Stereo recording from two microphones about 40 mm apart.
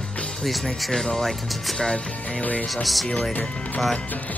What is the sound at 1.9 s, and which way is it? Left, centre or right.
Music, left.